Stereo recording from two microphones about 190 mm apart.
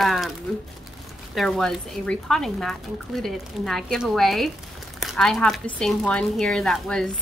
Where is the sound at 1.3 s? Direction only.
Centre (ahead or behind).